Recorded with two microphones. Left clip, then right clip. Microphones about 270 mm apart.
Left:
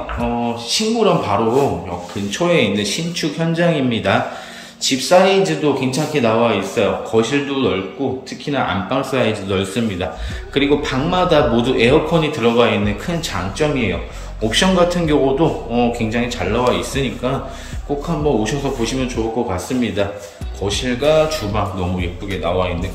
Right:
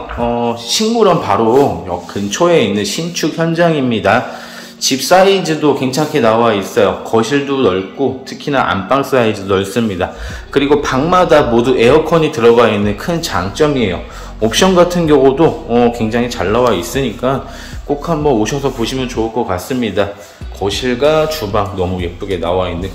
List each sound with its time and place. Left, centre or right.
0.7 s a man's voice: centre
2.3 s a man's voice: centre